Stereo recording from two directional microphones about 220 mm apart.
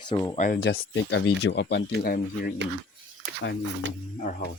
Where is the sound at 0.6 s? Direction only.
55° left (ahead or behind).